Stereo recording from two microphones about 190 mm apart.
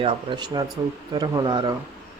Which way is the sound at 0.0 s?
25° right (ahead or behind).